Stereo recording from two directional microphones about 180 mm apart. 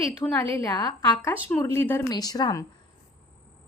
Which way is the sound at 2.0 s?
20° left (ahead or behind).